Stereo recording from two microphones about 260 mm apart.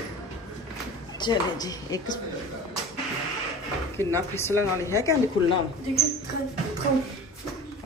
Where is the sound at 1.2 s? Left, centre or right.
Centre.